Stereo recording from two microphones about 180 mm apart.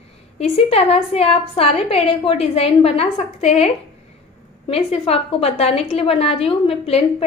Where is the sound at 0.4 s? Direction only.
35° left (ahead or behind).